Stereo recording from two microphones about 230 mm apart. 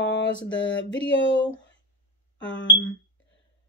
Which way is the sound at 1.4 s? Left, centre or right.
Left.